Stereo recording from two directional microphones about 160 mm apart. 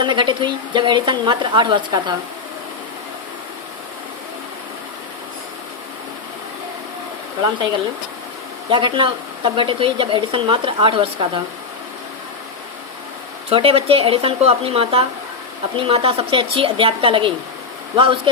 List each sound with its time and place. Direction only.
0.0 s speech: 30° right (ahead or behind)
8.7 s speech: 30° right (ahead or behind)
13.5 s speech: 35° right (ahead or behind)